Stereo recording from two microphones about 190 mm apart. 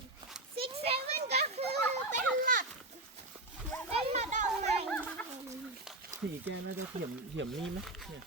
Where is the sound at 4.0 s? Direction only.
35° right (ahead or behind).